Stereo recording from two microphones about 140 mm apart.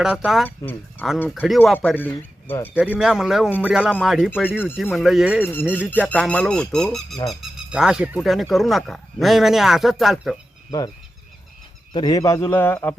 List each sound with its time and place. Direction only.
0.0 s a man's voice: 5° right (ahead or behind)
0.4 s speech: 15° left (ahead or behind)
1.3 s a man's voice: centre (ahead or behind)
2.7 s a man's voice: 10° right (ahead or behind)
5.4 s a man's voice: 15° left (ahead or behind)
10.7 s speech: 30° left (ahead or behind)
11.9 s speech: 25° left (ahead or behind)